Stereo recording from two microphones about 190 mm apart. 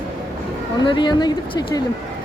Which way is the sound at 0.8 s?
25° left (ahead or behind).